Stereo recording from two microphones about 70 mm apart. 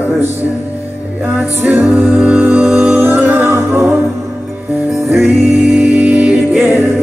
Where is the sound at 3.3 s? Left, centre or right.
Right.